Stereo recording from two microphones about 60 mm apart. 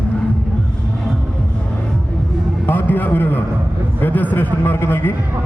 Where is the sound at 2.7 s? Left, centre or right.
Left.